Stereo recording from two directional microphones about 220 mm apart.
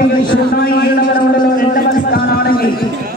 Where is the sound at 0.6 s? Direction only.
45° left (ahead or behind).